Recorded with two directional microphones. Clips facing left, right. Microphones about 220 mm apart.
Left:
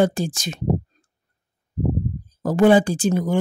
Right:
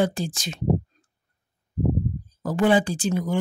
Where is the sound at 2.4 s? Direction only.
45° left (ahead or behind).